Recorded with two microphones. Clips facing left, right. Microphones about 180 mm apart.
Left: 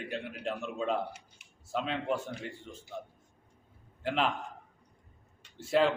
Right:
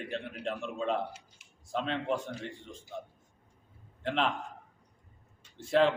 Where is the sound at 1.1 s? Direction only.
60° left (ahead or behind).